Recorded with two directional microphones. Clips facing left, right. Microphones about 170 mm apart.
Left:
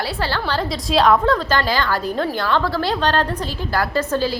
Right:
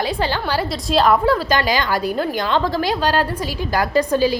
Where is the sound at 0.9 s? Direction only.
Centre (ahead or behind).